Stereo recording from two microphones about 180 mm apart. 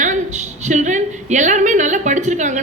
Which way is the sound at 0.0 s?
40° right (ahead or behind).